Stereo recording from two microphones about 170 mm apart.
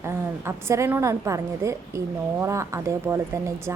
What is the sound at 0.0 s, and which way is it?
A woman's voice, 15° right (ahead or behind).